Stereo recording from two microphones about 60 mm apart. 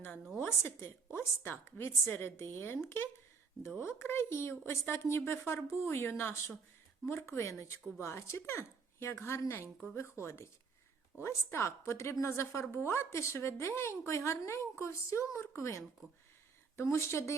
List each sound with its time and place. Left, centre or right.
0.3 s a woman's voice: left